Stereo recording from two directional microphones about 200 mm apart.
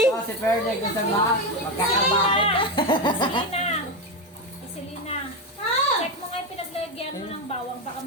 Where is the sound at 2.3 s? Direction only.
25° left (ahead or behind).